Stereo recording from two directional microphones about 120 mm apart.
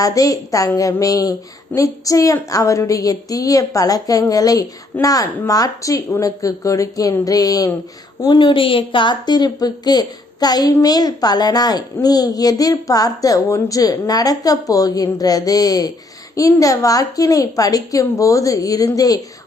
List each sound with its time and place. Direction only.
0.0 s a child's voice: 30° left (ahead or behind)